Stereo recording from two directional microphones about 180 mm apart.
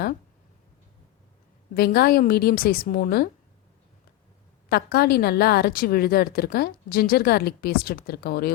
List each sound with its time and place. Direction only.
1.7 s a woman's voice: 60° left (ahead or behind)
4.7 s a woman's voice: 60° left (ahead or behind)